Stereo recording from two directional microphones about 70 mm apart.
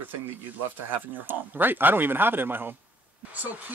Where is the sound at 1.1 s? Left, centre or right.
Right.